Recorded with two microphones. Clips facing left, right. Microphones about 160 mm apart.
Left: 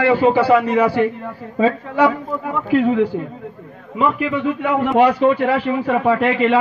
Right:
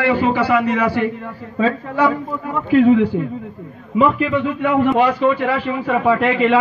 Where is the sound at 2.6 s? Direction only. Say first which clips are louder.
Right 3 dB; centre (ahead or behind).